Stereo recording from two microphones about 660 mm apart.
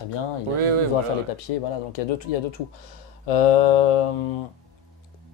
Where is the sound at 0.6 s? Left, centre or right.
Right.